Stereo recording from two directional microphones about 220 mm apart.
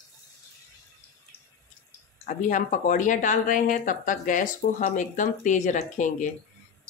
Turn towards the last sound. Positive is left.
turn(degrees=35)  # may be behind; listen again after turning